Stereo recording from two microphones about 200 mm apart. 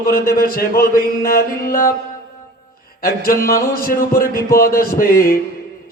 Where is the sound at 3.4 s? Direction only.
45° left (ahead or behind).